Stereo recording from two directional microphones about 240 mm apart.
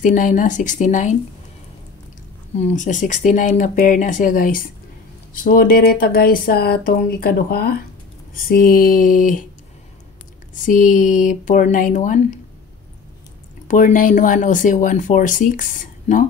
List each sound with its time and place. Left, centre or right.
0.0 s speech: left
2.5 s speech: left
10.5 s speech: left
13.7 s speech: left